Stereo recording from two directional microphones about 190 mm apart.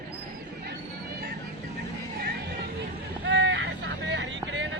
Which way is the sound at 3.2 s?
70° right (ahead or behind).